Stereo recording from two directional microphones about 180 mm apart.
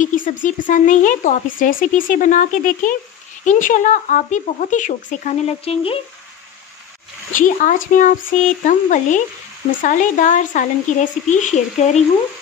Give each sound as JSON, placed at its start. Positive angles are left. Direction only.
{"t": 0.0, "sound": "speech", "side_deg": 45}
{"t": 7.3, "sound": "speech", "side_deg": 45}